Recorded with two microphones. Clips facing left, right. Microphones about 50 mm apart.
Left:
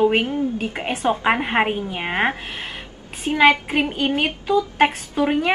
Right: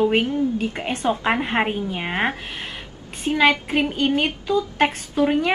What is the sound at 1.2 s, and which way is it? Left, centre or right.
Speech, centre.